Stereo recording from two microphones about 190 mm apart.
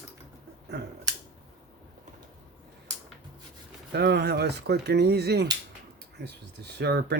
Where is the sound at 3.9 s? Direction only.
60° right (ahead or behind).